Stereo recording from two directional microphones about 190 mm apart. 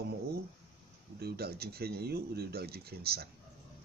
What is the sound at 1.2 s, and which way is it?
Speech, 55° right (ahead or behind).